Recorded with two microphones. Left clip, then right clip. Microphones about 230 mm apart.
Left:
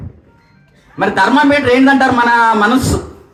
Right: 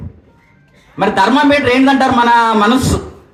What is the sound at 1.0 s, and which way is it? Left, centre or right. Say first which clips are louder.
A man's voice: even; right.